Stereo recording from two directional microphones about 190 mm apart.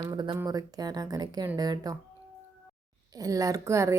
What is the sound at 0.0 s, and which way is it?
A woman's voice, 25° right (ahead or behind).